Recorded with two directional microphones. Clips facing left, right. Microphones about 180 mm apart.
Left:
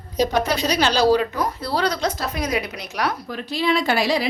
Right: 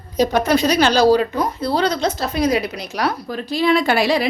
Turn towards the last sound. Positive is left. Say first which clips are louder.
# right 3 dB
turn(degrees=-60)  # may be behind; listen again after turning